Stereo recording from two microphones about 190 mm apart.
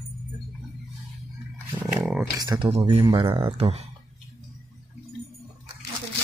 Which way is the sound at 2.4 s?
20° right (ahead or behind).